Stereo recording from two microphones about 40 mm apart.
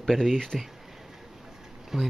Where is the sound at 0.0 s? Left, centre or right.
Centre.